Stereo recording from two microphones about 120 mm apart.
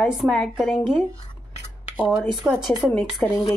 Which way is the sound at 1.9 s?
5° right (ahead or behind).